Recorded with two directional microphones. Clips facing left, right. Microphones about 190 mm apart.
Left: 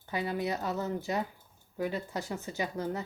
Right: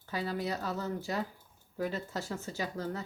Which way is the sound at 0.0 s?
20° left (ahead or behind).